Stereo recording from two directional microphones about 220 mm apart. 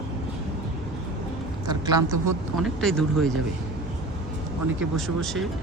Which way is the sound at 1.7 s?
15° right (ahead or behind).